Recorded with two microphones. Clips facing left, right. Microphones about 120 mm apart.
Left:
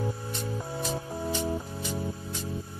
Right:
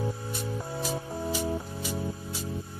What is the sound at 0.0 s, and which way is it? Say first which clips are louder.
Music: even; 5° right (ahead or behind).